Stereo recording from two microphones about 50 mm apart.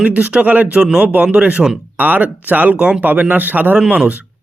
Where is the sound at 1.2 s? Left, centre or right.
Right.